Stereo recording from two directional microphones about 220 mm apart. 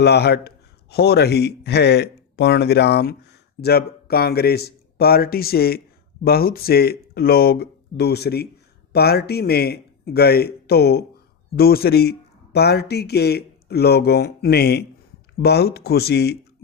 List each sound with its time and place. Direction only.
0.0 s a man's voice: 50° left (ahead or behind)